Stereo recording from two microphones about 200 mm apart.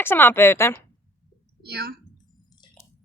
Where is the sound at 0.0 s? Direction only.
10° left (ahead or behind).